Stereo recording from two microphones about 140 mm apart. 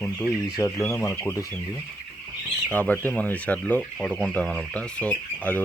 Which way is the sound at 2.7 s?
10° left (ahead or behind).